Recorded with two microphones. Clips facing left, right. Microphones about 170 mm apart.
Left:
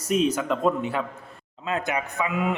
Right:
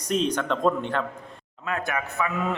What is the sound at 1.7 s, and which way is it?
Speech, 20° left (ahead or behind).